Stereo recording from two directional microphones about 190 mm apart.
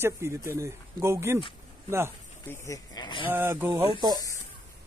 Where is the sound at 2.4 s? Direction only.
15° left (ahead or behind).